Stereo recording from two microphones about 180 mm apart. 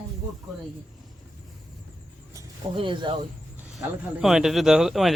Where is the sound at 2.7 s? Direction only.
25° right (ahead or behind).